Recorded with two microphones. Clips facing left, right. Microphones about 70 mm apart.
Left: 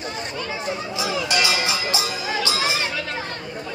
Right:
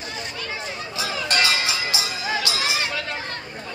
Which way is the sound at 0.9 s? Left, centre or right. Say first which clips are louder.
Even; centre.